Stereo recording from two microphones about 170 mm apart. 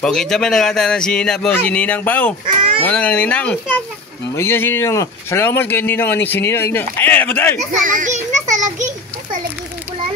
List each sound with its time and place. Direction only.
0.0 s speech: 5° left (ahead or behind)
2.4 s speech: 30° right (ahead or behind)
2.8 s speech: 10° left (ahead or behind)
7.8 s a sound: 50° right (ahead or behind)